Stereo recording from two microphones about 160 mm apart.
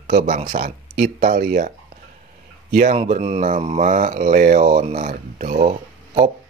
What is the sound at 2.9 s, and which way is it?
Speech, 40° right (ahead or behind).